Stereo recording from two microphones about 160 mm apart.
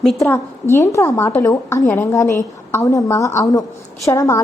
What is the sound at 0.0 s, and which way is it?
Speech, centre (ahead or behind).